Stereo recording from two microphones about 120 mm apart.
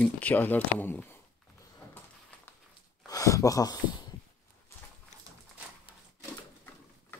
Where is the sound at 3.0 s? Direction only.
30° left (ahead or behind).